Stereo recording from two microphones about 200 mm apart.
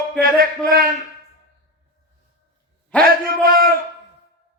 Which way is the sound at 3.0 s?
45° right (ahead or behind).